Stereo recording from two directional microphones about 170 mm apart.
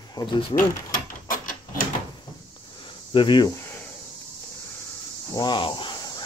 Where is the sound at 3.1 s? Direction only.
25° left (ahead or behind).